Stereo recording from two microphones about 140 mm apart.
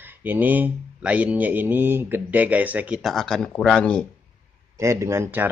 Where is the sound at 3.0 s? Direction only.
Centre (ahead or behind).